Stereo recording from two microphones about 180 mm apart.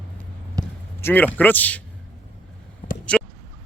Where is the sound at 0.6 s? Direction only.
20° right (ahead or behind).